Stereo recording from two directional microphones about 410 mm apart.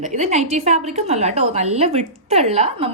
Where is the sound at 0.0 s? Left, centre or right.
Centre.